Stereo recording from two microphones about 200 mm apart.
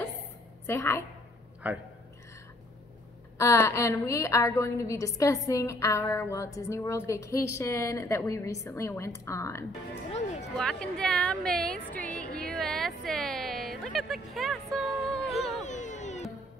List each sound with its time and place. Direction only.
0.7 s a woman's voice: 10° left (ahead or behind)
1.6 s a man's voice: 5° right (ahead or behind)
3.3 s a woman's voice: 15° left (ahead or behind)
11.9 s a sound: 5° left (ahead or behind)
15.6 s music: 35° left (ahead or behind)